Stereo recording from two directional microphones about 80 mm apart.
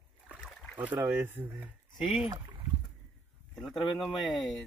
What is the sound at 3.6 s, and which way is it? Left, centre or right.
Speech, centre.